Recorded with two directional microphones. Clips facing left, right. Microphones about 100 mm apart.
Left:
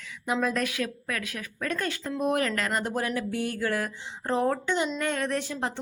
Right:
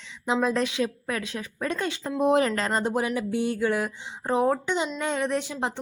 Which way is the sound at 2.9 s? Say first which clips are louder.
Right 3 dB; 20° right (ahead or behind).